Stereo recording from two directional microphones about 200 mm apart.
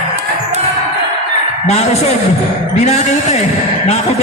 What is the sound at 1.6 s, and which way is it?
A man's voice, 35° left (ahead or behind).